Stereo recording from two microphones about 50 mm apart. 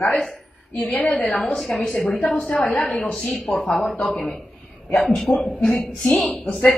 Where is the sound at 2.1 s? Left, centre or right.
Left.